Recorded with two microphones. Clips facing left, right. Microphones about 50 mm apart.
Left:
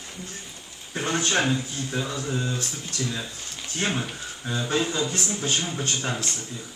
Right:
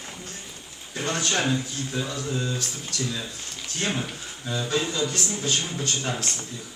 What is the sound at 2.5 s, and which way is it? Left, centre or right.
Speech, left.